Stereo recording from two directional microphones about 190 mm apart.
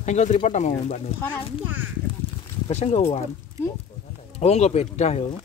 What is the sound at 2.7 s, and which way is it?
Speech, 35° left (ahead or behind).